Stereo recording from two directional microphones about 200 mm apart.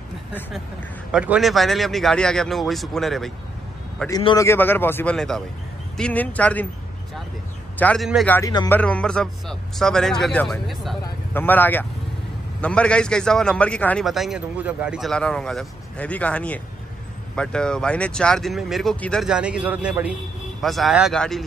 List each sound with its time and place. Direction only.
1.1 s a man's voice: 5° right (ahead or behind)
4.1 s a man's voice: 20° left (ahead or behind)
7.8 s a man's voice: centre (ahead or behind)
8.4 s a man's voice: 15° left (ahead or behind)